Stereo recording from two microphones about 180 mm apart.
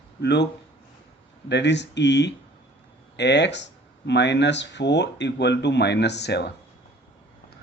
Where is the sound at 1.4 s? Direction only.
75° left (ahead or behind).